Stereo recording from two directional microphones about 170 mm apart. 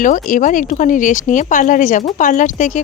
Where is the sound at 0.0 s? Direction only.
50° left (ahead or behind).